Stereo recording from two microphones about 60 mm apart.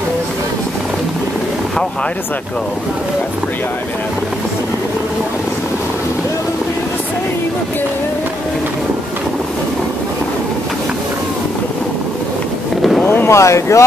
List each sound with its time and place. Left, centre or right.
13.0 s boat: left
13.3 s speech: left